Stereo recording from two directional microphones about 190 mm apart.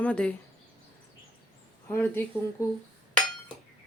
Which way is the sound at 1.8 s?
10° left (ahead or behind).